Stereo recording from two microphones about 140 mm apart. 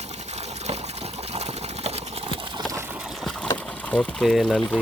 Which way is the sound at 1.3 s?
50° right (ahead or behind).